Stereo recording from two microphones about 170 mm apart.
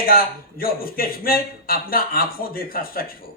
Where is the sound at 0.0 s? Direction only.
60° left (ahead or behind).